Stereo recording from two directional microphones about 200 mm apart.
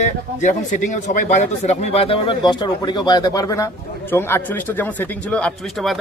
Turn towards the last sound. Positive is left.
turn(degrees=0)  # may be behind; listen again after turning